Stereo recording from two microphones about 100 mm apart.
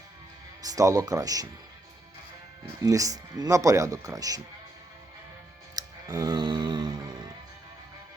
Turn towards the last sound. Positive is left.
turn(degrees=-45)  # may be behind; listen again after turning